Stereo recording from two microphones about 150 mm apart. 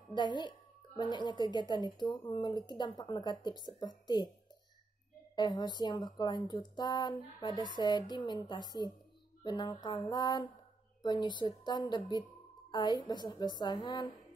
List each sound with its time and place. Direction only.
0.1 s speech: 30° left (ahead or behind)
5.3 s speech: 25° left (ahead or behind)